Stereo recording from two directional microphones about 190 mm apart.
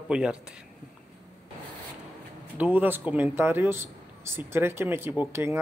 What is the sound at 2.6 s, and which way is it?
A man's voice, 10° right (ahead or behind).